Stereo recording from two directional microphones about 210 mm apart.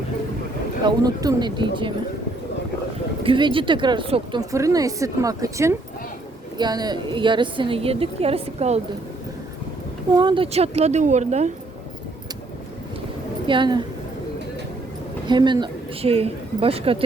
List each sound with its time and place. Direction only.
0.9 s a woman's voice: 20° right (ahead or behind)
3.2 s a woman's voice: 25° right (ahead or behind)
10.2 s speech: 25° right (ahead or behind)
13.5 s a woman's voice: 20° right (ahead or behind)
15.3 s a woman's voice: 20° right (ahead or behind)